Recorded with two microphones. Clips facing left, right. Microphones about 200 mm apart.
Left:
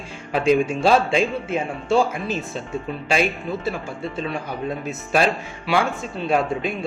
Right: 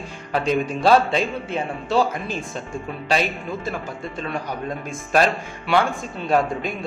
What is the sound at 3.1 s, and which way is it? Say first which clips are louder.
Speech: left 2 dB; 10° left (ahead or behind).